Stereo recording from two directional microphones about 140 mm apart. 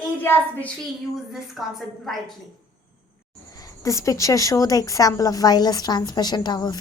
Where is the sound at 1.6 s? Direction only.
5° right (ahead or behind).